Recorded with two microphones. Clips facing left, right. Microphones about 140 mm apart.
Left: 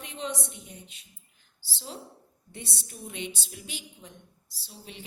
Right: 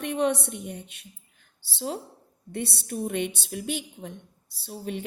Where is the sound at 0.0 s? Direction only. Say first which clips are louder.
Right 10 dB; 65° right (ahead or behind).